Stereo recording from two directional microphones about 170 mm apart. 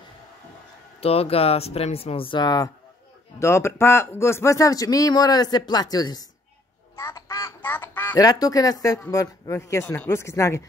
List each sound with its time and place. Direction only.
1.0 s speech: 35° left (ahead or behind)
7.0 s quack: 15° left (ahead or behind)
8.2 s speech: 20° left (ahead or behind)